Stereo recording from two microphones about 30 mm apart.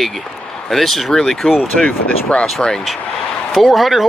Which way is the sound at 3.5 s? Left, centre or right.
Centre.